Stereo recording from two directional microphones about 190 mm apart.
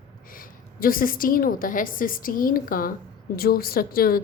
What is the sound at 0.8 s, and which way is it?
A woman's voice, 50° left (ahead or behind).